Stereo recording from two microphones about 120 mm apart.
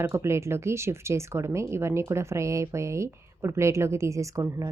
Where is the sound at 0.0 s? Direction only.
20° right (ahead or behind).